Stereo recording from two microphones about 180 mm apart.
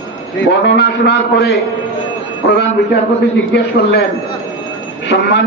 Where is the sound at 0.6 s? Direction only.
75° left (ahead or behind).